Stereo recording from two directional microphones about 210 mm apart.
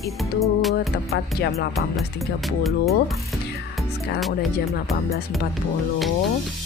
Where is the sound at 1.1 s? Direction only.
50° left (ahead or behind).